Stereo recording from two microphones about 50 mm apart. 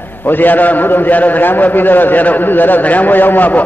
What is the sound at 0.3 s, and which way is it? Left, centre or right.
A man's voice, left.